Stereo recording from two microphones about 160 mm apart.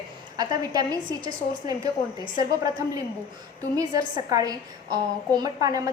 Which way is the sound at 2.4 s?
20° right (ahead or behind).